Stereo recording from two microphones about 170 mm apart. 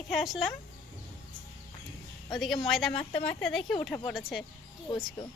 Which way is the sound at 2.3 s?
Centre (ahead or behind).